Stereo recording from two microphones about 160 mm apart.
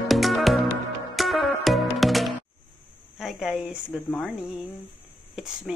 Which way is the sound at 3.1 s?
Centre (ahead or behind).